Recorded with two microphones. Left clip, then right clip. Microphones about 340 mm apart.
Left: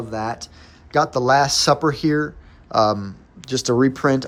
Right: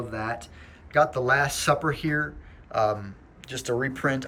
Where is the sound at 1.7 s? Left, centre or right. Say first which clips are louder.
Left 6 dB; centre.